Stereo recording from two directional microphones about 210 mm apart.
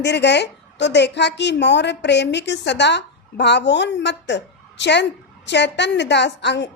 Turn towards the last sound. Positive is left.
turn(degrees=55)  # may be behind; listen again after turning